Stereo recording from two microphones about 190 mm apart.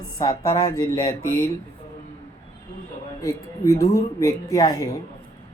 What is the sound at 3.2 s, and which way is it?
Speech, 15° left (ahead or behind).